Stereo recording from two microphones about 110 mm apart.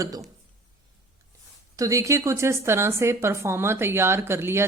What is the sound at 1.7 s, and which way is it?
A woman's voice, 30° right (ahead or behind).